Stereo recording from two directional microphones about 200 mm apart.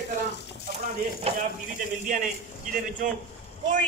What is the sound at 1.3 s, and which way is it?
Speech, 30° right (ahead or behind).